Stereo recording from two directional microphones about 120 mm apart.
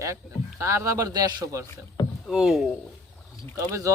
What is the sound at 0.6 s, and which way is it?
Speech, 25° right (ahead or behind).